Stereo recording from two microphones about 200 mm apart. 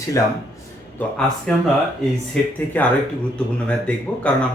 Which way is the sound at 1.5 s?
5° left (ahead or behind).